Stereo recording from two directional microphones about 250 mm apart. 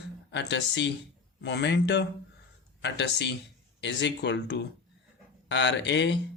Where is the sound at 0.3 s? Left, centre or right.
Left.